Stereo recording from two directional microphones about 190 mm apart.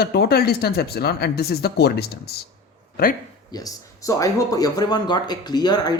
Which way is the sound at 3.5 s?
20° left (ahead or behind).